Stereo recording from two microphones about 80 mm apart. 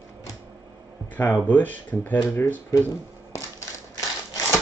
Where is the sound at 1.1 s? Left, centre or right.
Left.